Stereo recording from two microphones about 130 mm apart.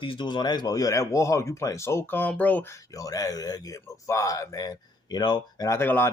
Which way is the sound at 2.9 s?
25° left (ahead or behind).